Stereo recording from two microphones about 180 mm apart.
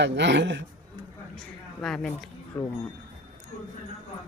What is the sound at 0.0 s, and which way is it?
Speech, 75° right (ahead or behind).